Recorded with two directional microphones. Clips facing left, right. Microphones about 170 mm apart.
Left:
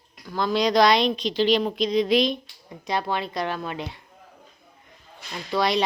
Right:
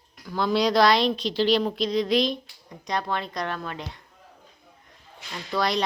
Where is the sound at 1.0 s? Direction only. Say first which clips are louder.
Left 1 dB; 15° left (ahead or behind).